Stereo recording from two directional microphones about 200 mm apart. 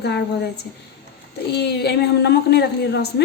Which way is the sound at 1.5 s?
55° left (ahead or behind).